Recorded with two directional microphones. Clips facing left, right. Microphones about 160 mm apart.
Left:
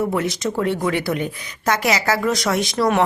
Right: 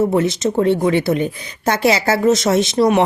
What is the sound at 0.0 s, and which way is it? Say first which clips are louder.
A woman's voice: right 5 dB; 25° right (ahead or behind).